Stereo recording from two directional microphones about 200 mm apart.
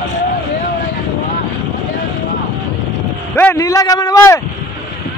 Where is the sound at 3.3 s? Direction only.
10° left (ahead or behind).